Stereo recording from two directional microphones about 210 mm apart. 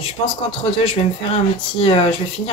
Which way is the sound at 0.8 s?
25° left (ahead or behind).